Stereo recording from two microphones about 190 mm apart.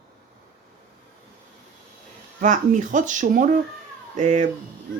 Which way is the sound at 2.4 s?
40° right (ahead or behind).